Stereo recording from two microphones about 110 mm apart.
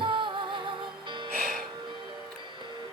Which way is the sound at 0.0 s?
50° right (ahead or behind).